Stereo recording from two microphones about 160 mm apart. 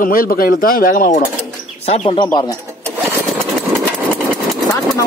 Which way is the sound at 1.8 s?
40° left (ahead or behind).